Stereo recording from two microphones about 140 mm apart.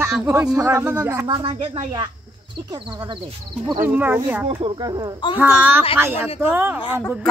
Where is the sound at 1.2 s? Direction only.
35° right (ahead or behind).